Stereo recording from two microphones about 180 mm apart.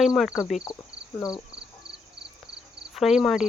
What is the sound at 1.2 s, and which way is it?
Speech, 20° left (ahead or behind).